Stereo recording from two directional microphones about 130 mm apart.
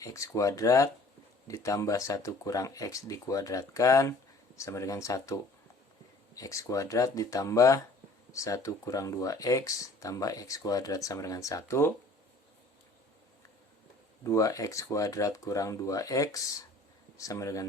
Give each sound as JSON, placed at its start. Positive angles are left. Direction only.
{"t": 0.0, "sound": "speech", "side_deg": 25}
{"t": 14.3, "sound": "speech", "side_deg": 25}